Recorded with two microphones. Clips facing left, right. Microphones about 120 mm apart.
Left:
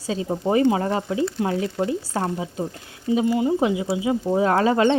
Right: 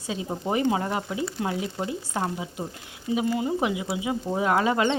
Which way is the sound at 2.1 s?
30° left (ahead or behind).